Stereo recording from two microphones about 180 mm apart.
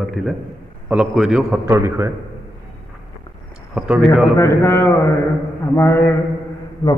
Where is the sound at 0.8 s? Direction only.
5° right (ahead or behind).